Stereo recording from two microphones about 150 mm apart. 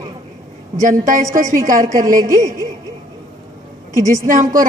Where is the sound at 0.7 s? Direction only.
60° right (ahead or behind).